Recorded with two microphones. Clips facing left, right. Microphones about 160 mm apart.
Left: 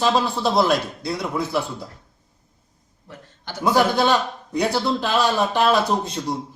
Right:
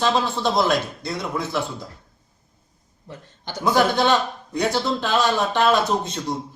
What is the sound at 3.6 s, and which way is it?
A man's voice, 10° left (ahead or behind).